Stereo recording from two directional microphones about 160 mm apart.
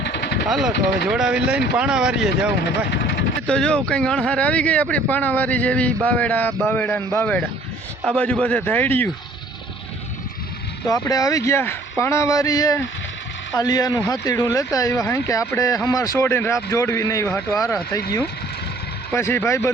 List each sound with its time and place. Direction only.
0.0 s vehicle: 90° left
0.4 s speech: centre (ahead or behind)
10.8 s speech: 25° left (ahead or behind)
19.1 s speech: 15° left (ahead or behind)